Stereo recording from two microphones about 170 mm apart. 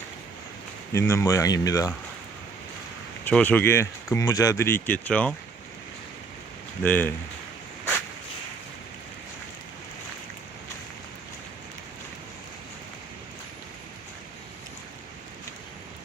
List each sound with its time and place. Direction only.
0.9 s speech: 15° left (ahead or behind)
3.2 s speech: 10° left (ahead or behind)
6.8 s speech: 10° left (ahead or behind)